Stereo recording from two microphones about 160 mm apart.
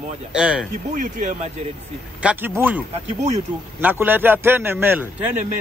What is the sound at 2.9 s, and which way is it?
Speech, 45° right (ahead or behind).